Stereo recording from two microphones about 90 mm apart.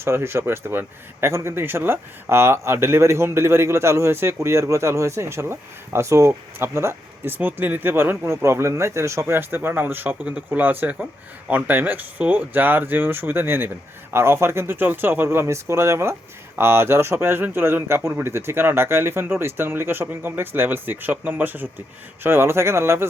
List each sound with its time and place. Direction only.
0.0 s a man's voice: 30° right (ahead or behind)